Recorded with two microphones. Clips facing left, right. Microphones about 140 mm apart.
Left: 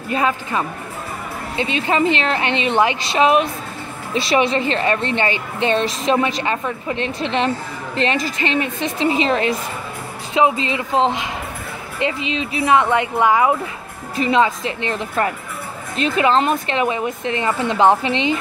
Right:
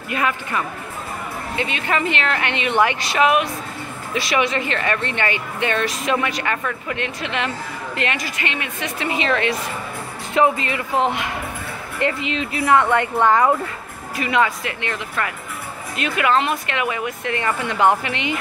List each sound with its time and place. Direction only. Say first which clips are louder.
0.1 s a woman's voice: left 3 dB; 25° left (ahead or behind)
10.3 s a woman's voice: left 1 dB; 20° left (ahead or behind)
14.1 s a woman's voice: left 3 dB; 25° left (ahead or behind)